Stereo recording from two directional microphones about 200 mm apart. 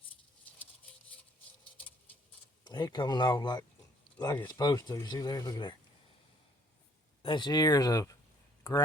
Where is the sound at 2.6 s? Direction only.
20° left (ahead or behind).